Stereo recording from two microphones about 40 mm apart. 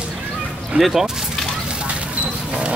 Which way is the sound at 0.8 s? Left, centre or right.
Centre.